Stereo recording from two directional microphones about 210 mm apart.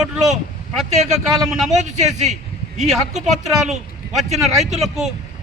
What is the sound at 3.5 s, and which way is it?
Speech, centre (ahead or behind).